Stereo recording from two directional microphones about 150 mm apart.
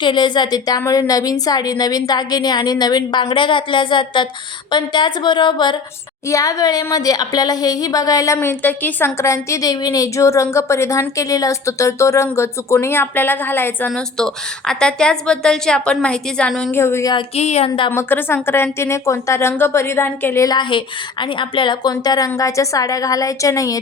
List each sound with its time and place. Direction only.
0.0 s a woman's voice: 30° left (ahead or behind); by 16.7 s 5° left (ahead or behind)
16.7 s speech: 15° left (ahead or behind)
17.2 s speech: 45° left (ahead or behind)
17.9 s a woman's voice: 15° left (ahead or behind)